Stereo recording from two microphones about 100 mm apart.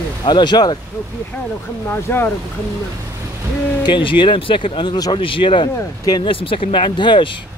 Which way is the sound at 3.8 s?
55° left (ahead or behind).